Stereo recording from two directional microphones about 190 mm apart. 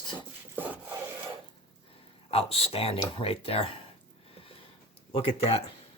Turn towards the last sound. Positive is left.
turn(degrees=30)  # may be behind; listen again after turning